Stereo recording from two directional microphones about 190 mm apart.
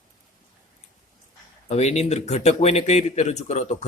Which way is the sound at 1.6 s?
35° left (ahead or behind).